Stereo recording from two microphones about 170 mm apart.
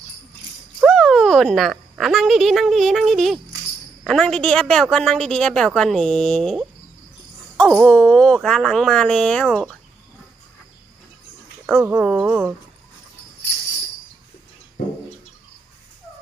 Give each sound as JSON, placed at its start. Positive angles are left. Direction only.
{"t": 0.8, "sound": "speech", "side_deg": 0}
{"t": 7.7, "sound": "speech", "side_deg": 0}
{"t": 11.6, "sound": "speech", "side_deg": -10}